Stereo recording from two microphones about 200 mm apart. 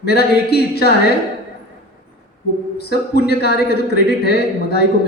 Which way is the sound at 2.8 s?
55° left (ahead or behind).